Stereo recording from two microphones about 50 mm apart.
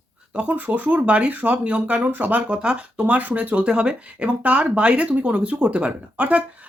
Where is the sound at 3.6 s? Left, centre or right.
Right.